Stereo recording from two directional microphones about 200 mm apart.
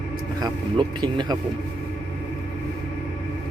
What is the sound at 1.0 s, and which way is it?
Speech, 20° right (ahead or behind).